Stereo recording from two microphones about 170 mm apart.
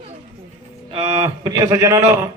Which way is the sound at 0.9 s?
35° right (ahead or behind).